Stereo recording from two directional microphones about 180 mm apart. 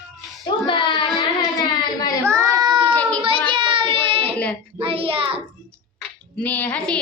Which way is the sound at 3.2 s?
30° right (ahead or behind).